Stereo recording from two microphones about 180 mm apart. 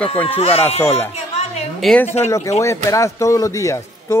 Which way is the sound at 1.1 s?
35° left (ahead or behind).